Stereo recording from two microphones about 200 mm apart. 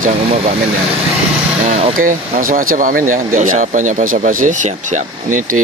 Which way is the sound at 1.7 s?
30° right (ahead or behind).